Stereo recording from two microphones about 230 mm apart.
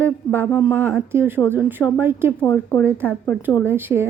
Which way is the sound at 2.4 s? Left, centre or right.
Centre.